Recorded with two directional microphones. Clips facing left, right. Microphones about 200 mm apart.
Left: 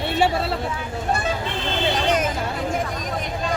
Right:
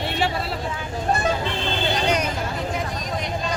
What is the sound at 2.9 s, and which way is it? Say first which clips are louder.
Vehicle: left 1 dB; 50° left (ahead or behind).